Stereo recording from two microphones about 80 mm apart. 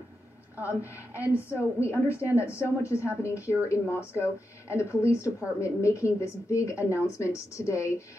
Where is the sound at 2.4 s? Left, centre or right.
Left.